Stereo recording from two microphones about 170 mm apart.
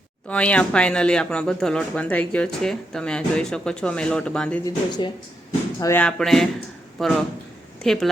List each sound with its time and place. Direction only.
0.3 s speech: 5° left (ahead or behind)
4.6 s speech: 25° left (ahead or behind)
5.8 s speech: 10° left (ahead or behind)